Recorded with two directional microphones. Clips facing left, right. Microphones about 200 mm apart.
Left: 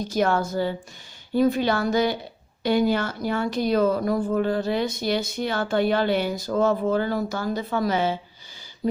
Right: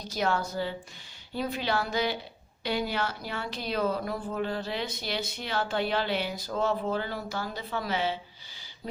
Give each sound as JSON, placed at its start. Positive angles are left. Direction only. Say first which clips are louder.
{"t": 0.0, "sound": "speech", "louder": "left 7 dB", "side_deg": 50}